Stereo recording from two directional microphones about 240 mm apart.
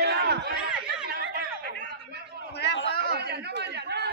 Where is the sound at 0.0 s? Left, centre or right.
Right.